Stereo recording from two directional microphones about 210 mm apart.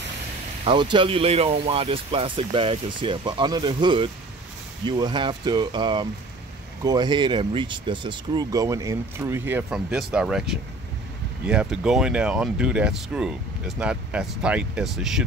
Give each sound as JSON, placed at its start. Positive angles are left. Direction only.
{"t": 0.7, "sound": "speech", "side_deg": -20}
{"t": 11.4, "sound": "speech", "side_deg": -5}